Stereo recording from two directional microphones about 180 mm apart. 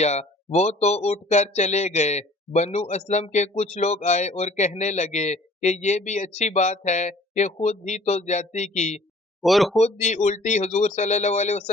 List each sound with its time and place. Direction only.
0.0 s speech: 40° left (ahead or behind)
9.4 s speech: centre (ahead or behind)
9.7 s speech: 40° left (ahead or behind)